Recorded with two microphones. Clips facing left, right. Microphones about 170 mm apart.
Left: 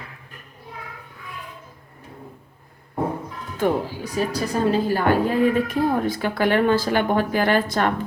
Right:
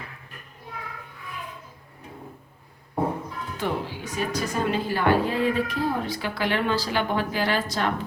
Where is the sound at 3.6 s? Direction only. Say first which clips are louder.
Left 7 dB; 35° left (ahead or behind).